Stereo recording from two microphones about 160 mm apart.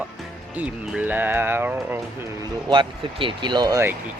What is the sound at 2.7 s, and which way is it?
Speech, 30° right (ahead or behind).